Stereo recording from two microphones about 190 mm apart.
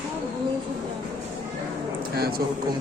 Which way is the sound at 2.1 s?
55° right (ahead or behind).